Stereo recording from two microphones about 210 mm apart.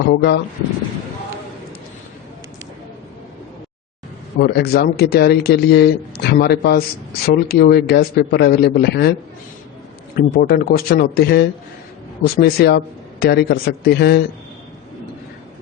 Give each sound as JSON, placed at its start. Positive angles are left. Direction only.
{"t": 0.1, "sound": "speech", "side_deg": 55}
{"t": 4.4, "sound": "a man's voice", "side_deg": 50}
{"t": 10.2, "sound": "a man's voice", "side_deg": 45}